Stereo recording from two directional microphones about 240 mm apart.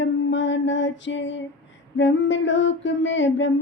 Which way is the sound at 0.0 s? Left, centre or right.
Left.